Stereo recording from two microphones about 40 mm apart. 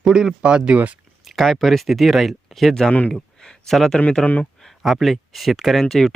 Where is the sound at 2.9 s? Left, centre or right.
Left.